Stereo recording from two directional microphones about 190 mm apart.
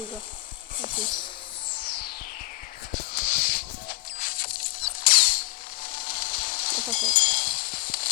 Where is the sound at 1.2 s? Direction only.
25° left (ahead or behind).